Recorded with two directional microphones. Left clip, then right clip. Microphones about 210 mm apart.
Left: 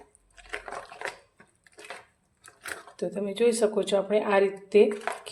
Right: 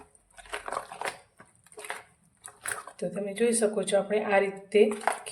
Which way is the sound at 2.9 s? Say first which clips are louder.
Left 4 dB; 30° left (ahead or behind).